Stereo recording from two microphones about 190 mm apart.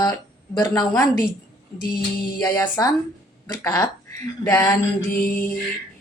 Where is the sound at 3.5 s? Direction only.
15° left (ahead or behind).